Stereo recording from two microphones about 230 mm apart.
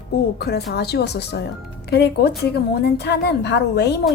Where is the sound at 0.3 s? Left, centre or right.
Left.